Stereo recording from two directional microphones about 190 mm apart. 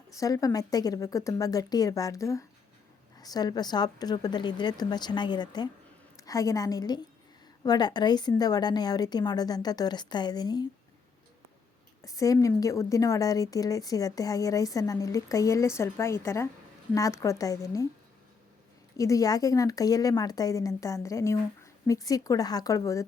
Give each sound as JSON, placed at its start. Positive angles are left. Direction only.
{"t": 0.2, "sound": "a woman's voice", "side_deg": 15}
{"t": 12.0, "sound": "a woman's voice", "side_deg": 20}
{"t": 18.9, "sound": "a woman's voice", "side_deg": 15}